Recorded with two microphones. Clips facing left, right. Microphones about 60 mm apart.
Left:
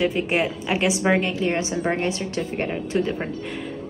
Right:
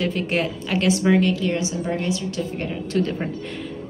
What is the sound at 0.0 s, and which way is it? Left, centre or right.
A woman's voice, centre.